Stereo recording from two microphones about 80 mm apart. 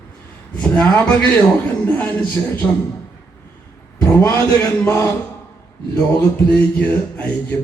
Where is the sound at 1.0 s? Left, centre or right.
Centre.